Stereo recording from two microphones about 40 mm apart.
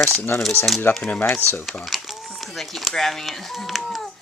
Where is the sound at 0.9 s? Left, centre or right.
Left.